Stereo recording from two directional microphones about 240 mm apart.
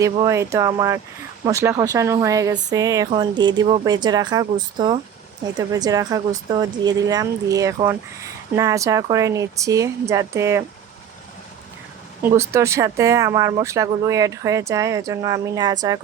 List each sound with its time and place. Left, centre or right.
0.0 s speech: centre
12.2 s speech: centre